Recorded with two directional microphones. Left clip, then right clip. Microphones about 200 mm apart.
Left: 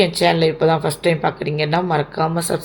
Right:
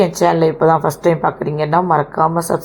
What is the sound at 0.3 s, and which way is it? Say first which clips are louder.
Speech: right 3 dB; 35° right (ahead or behind).